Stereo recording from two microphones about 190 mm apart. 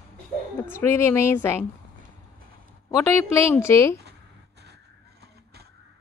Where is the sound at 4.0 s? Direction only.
60° right (ahead or behind).